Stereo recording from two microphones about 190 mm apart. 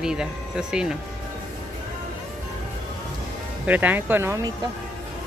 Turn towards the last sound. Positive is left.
turn(degrees=-20)  # may be behind; listen again after turning